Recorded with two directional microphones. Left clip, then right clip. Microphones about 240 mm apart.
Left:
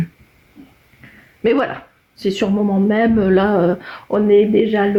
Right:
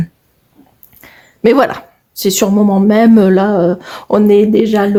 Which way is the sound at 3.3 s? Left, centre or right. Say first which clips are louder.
Right 3 dB; right.